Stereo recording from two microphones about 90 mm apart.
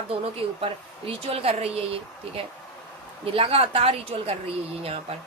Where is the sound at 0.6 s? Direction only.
90° right.